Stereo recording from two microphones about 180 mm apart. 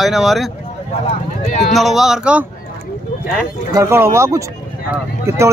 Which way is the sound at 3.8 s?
15° right (ahead or behind).